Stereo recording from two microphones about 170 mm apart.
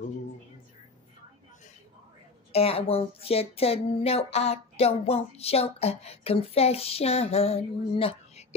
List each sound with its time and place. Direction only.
2.5 s speech: 35° left (ahead or behind)